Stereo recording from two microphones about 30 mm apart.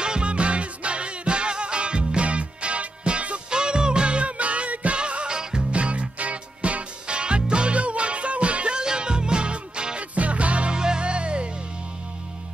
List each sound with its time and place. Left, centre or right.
0.0 s music: right
4.9 s music: right
8.7 s music: right
9.9 s music: right
10.7 s music: right